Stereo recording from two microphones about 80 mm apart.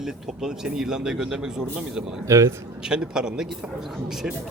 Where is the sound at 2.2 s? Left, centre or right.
Right.